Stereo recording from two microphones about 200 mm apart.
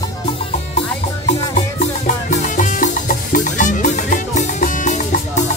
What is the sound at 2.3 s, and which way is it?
Music, 40° left (ahead or behind).